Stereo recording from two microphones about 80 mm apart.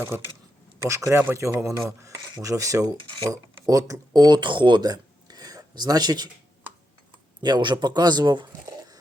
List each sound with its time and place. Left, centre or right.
0.1 s speech: right
0.8 s speech: right
3.0 s mechanisms: right
3.2 s speech: right
7.4 s speech: right